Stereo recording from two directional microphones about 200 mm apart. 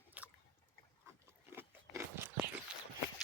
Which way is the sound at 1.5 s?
10° right (ahead or behind).